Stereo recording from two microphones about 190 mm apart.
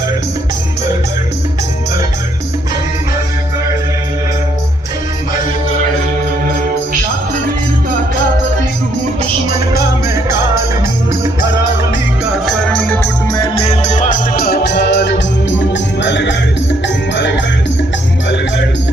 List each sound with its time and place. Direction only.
12.5 s music: 5° left (ahead or behind)
13.3 s music: 25° left (ahead or behind); by 17.4 s 70° left (ahead or behind)